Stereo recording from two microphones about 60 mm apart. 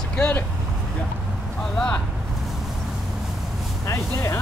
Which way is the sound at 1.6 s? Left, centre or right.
Centre.